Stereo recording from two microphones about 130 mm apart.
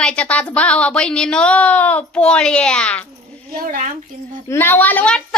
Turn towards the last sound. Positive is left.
turn(degrees=10)  # may be behind; listen again after turning